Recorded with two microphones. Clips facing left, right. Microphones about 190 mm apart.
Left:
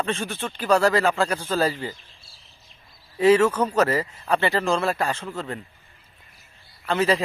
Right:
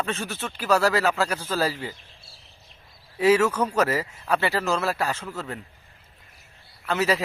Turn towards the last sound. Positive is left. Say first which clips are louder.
# left 2 dB
turn(degrees=-5)  # may be behind; listen again after turning